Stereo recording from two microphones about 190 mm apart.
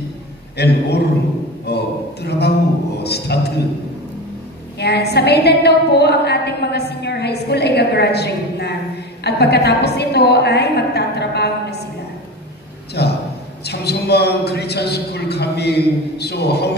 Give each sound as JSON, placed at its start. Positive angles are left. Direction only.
{"t": 0.6, "sound": "a woman's voice", "side_deg": 60}
{"t": 1.7, "sound": "a sound", "side_deg": 60}
{"t": 2.2, "sound": "a man's voice", "side_deg": 60}
{"t": 4.7, "sound": "a woman's voice", "side_deg": 60}
{"t": 13.0, "sound": "a man's voice", "side_deg": 60}